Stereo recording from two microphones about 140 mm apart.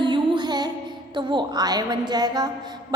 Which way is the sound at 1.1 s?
35° right (ahead or behind).